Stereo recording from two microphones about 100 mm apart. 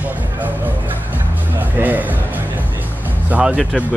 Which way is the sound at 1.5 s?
15° right (ahead or behind).